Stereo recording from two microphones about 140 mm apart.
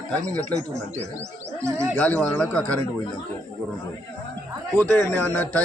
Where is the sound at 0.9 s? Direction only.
55° right (ahead or behind).